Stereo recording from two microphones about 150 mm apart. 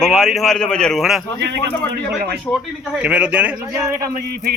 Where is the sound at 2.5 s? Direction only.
5° right (ahead or behind).